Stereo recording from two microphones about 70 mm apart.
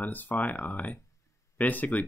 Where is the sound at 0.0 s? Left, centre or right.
Left.